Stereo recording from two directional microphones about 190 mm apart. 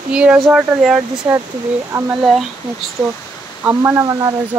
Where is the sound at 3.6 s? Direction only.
15° right (ahead or behind).